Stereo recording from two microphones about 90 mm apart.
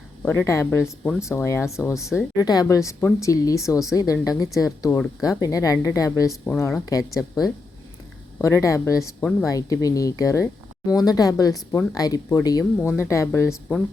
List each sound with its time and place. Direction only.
0.2 s a woman's voice: 25° left (ahead or behind)
2.3 s speech: 45° left (ahead or behind); by 6.8 s 30° left (ahead or behind)
6.8 s speech: 40° left (ahead or behind)
12.9 s speech: 30° left (ahead or behind)